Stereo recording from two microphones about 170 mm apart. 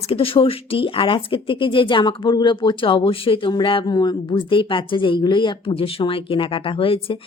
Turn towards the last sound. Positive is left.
turn(degrees=30)  # may be behind; listen again after turning